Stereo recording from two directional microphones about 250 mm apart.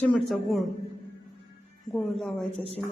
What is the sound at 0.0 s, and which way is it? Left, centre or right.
Speech, centre.